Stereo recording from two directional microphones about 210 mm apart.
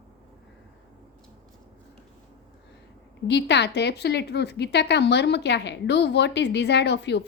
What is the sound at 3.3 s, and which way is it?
Speech, 55° left (ahead or behind).